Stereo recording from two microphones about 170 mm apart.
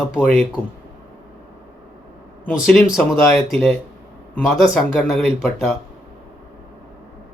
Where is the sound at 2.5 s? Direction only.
5° right (ahead or behind).